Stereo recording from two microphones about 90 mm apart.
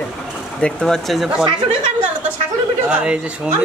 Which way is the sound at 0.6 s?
10° left (ahead or behind).